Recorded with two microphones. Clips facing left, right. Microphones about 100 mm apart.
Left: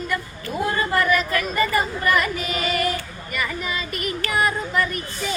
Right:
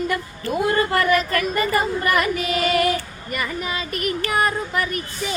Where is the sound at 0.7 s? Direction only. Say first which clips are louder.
Even; 55° right (ahead or behind).